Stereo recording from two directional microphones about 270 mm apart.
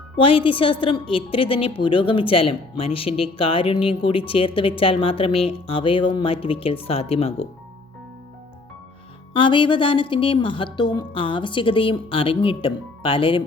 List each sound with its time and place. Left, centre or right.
0.2 s a woman's voice: centre
9.3 s a woman's voice: centre